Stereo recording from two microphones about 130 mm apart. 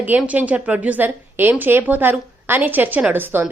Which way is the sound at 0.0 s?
10° right (ahead or behind).